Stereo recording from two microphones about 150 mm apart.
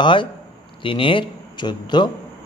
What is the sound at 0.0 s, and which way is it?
Speech, 35° left (ahead or behind).